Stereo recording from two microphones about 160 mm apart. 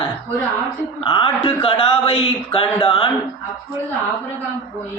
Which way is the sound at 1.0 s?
30° left (ahead or behind).